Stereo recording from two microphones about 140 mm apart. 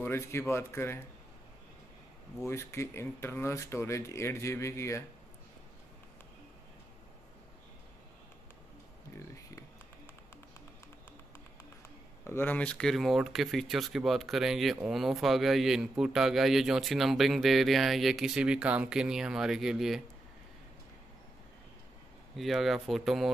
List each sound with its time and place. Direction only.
0.0 s speech: 15° left (ahead or behind)
2.4 s speech: 20° left (ahead or behind)
9.1 s a sound: 20° left (ahead or behind)
12.3 s speech: 15° left (ahead or behind); by 20.0 s 5° right (ahead or behind)
22.4 s speech: centre (ahead or behind)